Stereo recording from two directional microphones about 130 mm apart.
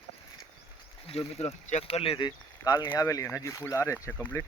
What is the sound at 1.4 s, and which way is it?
Speech, 60° left (ahead or behind).